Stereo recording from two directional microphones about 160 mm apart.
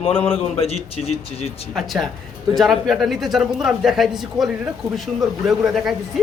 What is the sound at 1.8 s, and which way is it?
A man's voice, centre (ahead or behind).